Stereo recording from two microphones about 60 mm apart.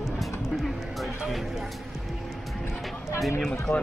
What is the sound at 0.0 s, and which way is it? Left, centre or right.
Music, centre.